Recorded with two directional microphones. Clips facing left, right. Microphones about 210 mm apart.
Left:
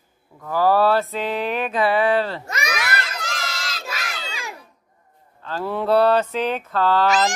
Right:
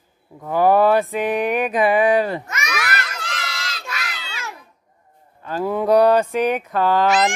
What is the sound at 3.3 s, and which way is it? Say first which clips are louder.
Crowd: left 1 dB; 45° left (ahead or behind).